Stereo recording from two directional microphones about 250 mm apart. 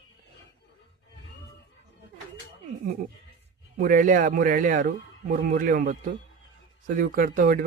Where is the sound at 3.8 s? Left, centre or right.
Right.